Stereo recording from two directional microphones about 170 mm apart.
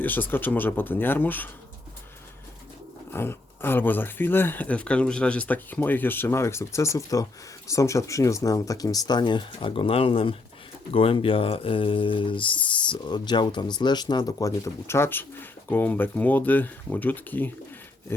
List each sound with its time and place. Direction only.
0.0 s speech: 10° left (ahead or behind)
3.1 s speech: 15° left (ahead or behind)